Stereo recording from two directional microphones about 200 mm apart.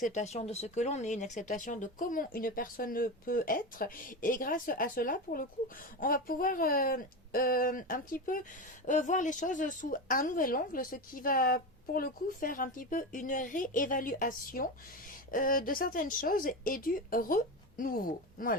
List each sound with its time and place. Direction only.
0.0 s speech: 35° left (ahead or behind)